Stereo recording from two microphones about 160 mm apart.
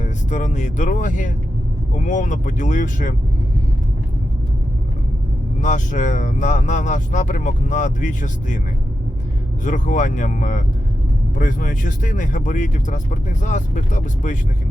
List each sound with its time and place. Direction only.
0.0 s speech: 50° left (ahead or behind)
5.5 s speech: 50° left (ahead or behind)
9.6 s speech: 55° left (ahead or behind)